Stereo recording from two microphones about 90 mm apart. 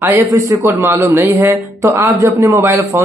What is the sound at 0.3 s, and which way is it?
Speech, 40° right (ahead or behind).